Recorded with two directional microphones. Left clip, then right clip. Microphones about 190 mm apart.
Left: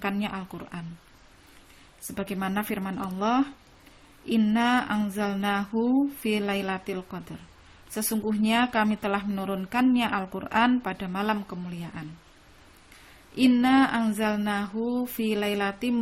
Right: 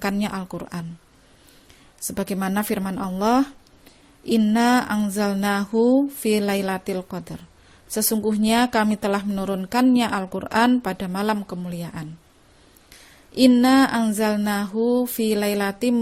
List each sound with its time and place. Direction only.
0.0 s speech: 40° right (ahead or behind)
2.1 s speech: 40° right (ahead or behind)
13.3 s speech: 40° right (ahead or behind)